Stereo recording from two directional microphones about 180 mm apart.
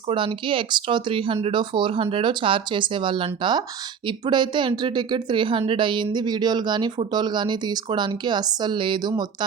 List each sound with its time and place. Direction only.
0.1 s speech: 30° right (ahead or behind)